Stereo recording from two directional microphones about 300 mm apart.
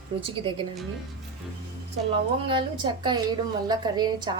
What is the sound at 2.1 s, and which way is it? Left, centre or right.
A woman's voice, centre.